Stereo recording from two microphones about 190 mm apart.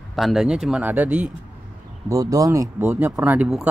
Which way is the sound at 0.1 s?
Centre (ahead or behind).